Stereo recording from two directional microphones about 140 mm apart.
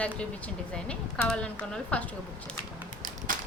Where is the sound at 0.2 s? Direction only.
10° left (ahead or behind).